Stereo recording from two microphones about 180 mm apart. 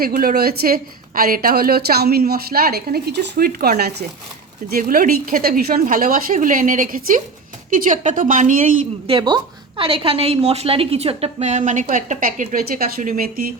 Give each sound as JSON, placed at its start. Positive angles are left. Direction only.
{"t": 0.0, "sound": "a woman's voice", "side_deg": -55}
{"t": 4.7, "sound": "speech", "side_deg": -50}
{"t": 9.0, "sound": "a woman's voice", "side_deg": -25}